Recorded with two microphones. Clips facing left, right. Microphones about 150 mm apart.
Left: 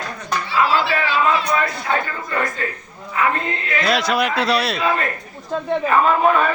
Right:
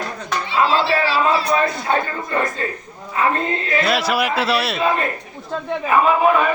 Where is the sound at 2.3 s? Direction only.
25° right (ahead or behind).